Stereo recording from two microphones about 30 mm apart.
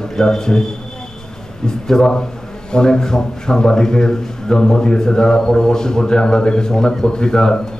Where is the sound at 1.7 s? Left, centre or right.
Left.